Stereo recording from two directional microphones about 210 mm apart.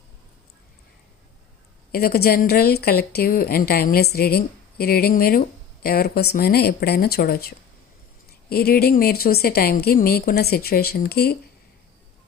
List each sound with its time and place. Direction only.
1.9 s a woman's voice: 45° left (ahead or behind)